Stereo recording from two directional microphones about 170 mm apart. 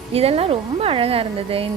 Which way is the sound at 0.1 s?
35° right (ahead or behind).